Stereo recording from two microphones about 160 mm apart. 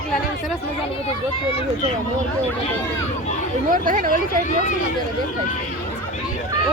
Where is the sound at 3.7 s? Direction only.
60° right (ahead or behind).